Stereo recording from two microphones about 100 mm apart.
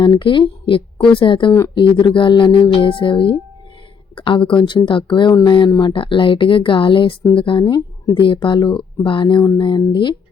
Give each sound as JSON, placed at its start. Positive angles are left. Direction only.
{"t": 0.0, "sound": "a woman's voice", "side_deg": 55}